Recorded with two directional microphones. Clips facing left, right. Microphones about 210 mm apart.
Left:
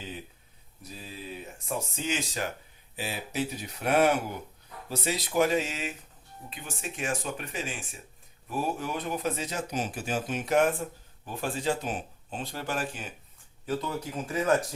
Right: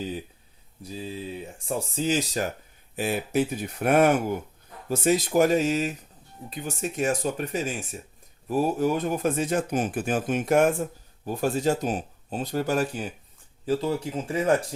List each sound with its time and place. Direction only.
1.6 s speech: 35° right (ahead or behind)
2.9 s speech: 50° right (ahead or behind)
13.7 s speech: 30° right (ahead or behind)